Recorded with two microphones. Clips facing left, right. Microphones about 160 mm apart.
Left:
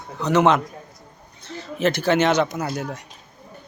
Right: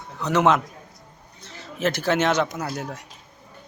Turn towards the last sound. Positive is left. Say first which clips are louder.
# left 3 dB
turn(degrees=0)  # may be behind; listen again after turning